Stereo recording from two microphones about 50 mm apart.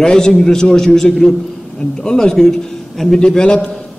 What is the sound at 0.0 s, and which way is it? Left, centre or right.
A man's voice, centre.